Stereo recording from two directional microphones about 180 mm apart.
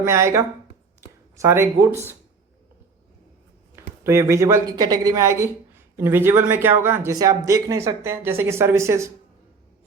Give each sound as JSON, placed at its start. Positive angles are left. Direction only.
{"t": 0.0, "sound": "speech", "side_deg": -15}
{"t": 3.8, "sound": "speech", "side_deg": -15}